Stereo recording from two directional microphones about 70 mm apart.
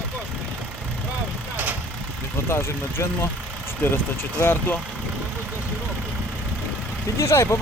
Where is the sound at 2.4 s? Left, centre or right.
Left.